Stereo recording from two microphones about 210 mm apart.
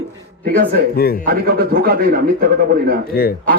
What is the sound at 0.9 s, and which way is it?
Speech, 45° left (ahead or behind).